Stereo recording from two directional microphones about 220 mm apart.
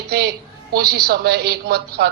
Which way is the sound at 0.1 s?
45° right (ahead or behind).